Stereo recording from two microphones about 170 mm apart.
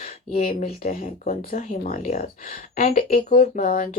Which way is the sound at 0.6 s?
55° left (ahead or behind).